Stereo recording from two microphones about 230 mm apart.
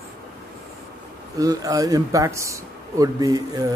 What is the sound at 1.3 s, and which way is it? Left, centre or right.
Speech, centre.